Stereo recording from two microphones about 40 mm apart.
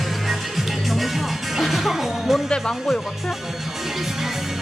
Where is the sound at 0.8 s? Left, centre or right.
Centre.